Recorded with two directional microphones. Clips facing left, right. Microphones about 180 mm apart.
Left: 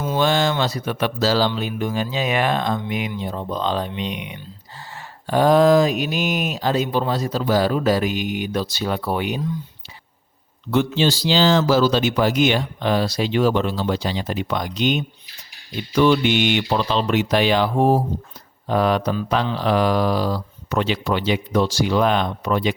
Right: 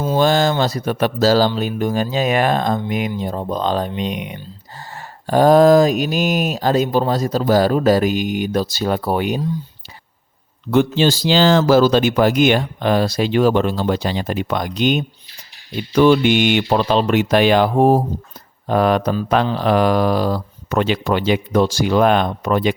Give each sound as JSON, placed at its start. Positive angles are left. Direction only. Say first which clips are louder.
{"t": 0.0, "sound": "speech", "louder": "right 4 dB", "side_deg": -40}
{"t": 10.7, "sound": "speech", "louder": "right 4 dB", "side_deg": -45}